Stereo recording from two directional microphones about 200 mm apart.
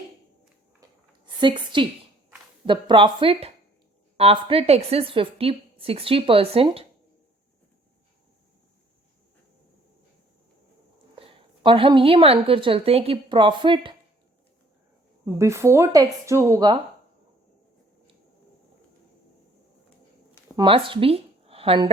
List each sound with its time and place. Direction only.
1.4 s a woman's voice: 25° right (ahead or behind)
11.1 s a woman's voice: 25° right (ahead or behind)
15.4 s speech: 15° right (ahead or behind)
20.3 s a sound: 25° right (ahead or behind)